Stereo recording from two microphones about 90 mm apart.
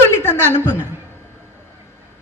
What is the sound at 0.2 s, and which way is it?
Speech, 25° left (ahead or behind).